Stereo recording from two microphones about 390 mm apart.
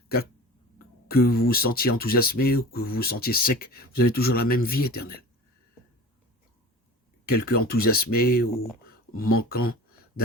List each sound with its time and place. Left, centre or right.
1.0 s speech: left
7.3 s speech: left